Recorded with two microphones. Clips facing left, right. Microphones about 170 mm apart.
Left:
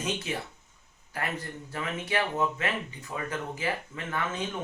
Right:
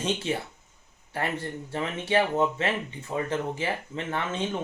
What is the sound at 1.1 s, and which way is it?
Speech, 30° right (ahead or behind).